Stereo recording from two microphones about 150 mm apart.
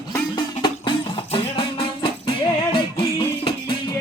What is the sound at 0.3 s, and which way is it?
Music, 30° left (ahead or behind).